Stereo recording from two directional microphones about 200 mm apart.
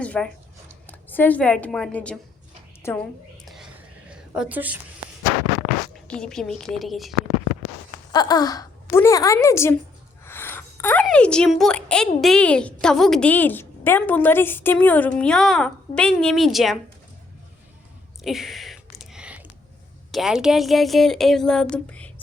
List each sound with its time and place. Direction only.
0.0 s a sound: 5° left (ahead or behind)
0.9 s a woman's voice: 10° left (ahead or behind)
3.4 s whispering: centre (ahead or behind)
4.1 s a woman's voice: 5° right (ahead or behind)
6.1 s a woman's voice: 5° left (ahead or behind)
8.1 s a woman's voice: 20° left (ahead or behind)
10.2 s a sound: 10° left (ahead or behind)
11.0 s a woman's voice: 5° left (ahead or behind)
18.2 s a sound: centre (ahead or behind)
20.1 s a woman's voice: centre (ahead or behind)